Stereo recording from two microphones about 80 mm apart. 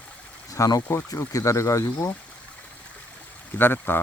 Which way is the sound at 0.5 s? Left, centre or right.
Left.